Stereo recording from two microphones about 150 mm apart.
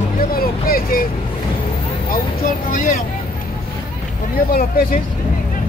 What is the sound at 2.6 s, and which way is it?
Speech, 60° left (ahead or behind).